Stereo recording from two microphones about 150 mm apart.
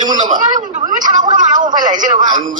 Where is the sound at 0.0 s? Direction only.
30° right (ahead or behind).